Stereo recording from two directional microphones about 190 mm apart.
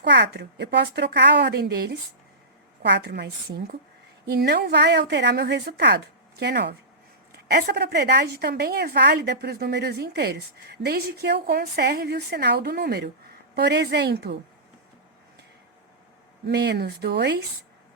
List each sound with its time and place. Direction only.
0.0 s a woman's voice: 65° right (ahead or behind)
16.5 s a woman's voice: 65° right (ahead or behind)